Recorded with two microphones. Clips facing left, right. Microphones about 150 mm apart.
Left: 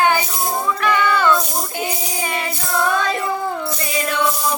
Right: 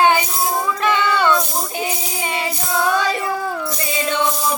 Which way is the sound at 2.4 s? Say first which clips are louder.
Right 2 dB; centre (ahead or behind).